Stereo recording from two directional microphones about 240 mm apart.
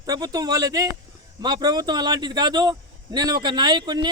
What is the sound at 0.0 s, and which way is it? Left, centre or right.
A man's voice, centre.